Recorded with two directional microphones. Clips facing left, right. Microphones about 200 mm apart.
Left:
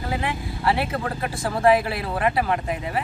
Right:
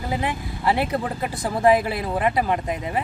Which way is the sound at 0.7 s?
15° right (ahead or behind).